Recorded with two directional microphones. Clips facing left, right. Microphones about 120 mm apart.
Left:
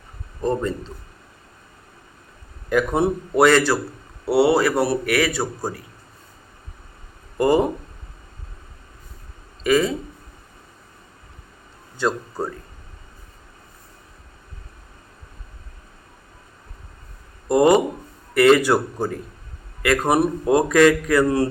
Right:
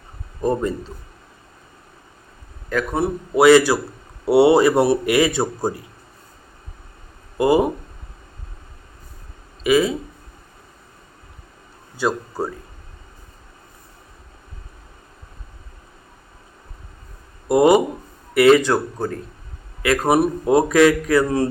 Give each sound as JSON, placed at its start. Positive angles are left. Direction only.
{"t": 0.4, "sound": "a man's voice", "side_deg": -10}
{"t": 2.6, "sound": "a man's voice", "side_deg": 15}
{"t": 3.3, "sound": "a man's voice", "side_deg": -5}
{"t": 7.3, "sound": "a man's voice", "side_deg": -5}
{"t": 9.6, "sound": "a man's voice", "side_deg": -5}
{"t": 11.9, "sound": "a man's voice", "side_deg": -5}
{"t": 17.5, "sound": "a man's voice", "side_deg": -10}
{"t": 18.6, "sound": "speech", "side_deg": 10}
{"t": 19.8, "sound": "a man's voice", "side_deg": -5}